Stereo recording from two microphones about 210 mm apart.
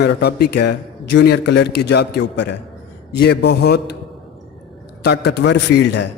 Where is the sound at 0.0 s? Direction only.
50° left (ahead or behind).